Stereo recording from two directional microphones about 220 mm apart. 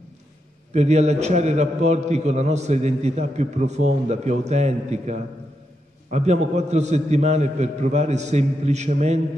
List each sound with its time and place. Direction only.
0.7 s a man's voice: 30° right (ahead or behind)